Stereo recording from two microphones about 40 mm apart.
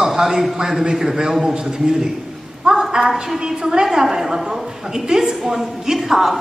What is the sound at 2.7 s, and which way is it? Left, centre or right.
A woman's voice, centre.